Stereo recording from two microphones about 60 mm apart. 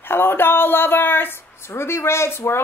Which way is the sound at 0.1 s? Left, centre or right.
Left.